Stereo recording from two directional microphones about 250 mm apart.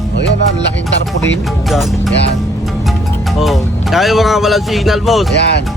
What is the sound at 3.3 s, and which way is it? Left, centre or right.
Speech, centre.